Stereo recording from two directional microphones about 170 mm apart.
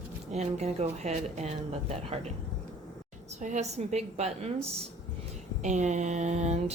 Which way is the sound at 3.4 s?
40° right (ahead or behind).